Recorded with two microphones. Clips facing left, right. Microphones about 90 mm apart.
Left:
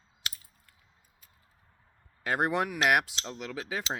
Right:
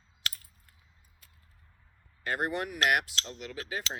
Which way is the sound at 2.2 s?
90° left.